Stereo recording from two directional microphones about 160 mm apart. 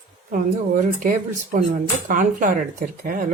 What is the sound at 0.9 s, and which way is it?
Speech, 55° right (ahead or behind).